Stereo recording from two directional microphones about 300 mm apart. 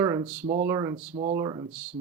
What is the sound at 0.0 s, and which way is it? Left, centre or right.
Speech, centre.